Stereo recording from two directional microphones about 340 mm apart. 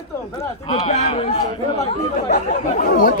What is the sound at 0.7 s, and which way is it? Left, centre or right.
Speech, centre.